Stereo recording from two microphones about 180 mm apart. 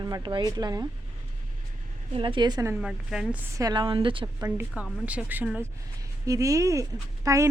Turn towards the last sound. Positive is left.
turn(degrees=-15)  # may be behind; listen again after turning